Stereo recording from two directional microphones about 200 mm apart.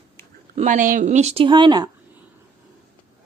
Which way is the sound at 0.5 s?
40° right (ahead or behind).